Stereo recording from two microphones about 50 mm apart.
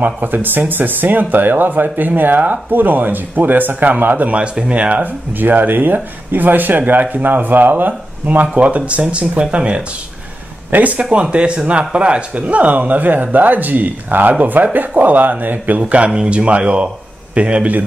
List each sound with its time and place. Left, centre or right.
0.0 s speech: right